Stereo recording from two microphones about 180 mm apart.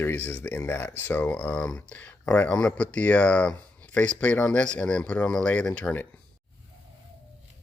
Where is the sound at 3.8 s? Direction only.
5° left (ahead or behind).